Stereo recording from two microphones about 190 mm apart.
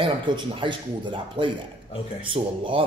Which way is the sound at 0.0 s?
25° right (ahead or behind).